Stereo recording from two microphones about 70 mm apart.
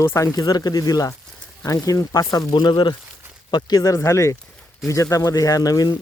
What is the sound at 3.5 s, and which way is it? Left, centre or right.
Speech, left.